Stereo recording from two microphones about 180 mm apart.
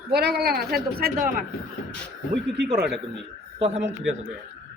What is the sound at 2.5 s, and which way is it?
Speech, 70° right (ahead or behind).